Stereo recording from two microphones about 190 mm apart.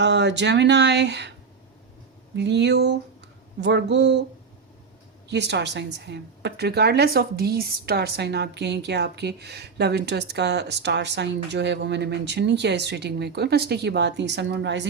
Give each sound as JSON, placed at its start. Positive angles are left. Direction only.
{"t": 0.0, "sound": "a woman's voice", "side_deg": -65}
{"t": 2.3, "sound": "a woman's voice", "side_deg": -65}
{"t": 5.3, "sound": "a woman's voice", "side_deg": -65}